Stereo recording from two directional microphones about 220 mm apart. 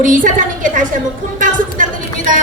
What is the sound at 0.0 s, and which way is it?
Speech, 35° right (ahead or behind).